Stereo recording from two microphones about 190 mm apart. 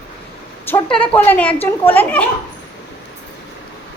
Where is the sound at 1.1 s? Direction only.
10° left (ahead or behind).